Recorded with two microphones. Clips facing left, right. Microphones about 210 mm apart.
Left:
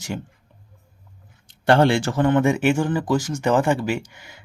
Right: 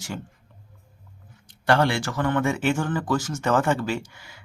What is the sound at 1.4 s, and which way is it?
Speech, 25° left (ahead or behind).